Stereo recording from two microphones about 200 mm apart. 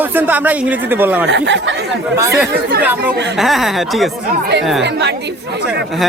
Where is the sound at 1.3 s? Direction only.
65° right (ahead or behind).